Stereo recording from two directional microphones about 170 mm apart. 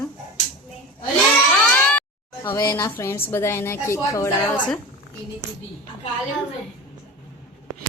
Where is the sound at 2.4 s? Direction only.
10° left (ahead or behind).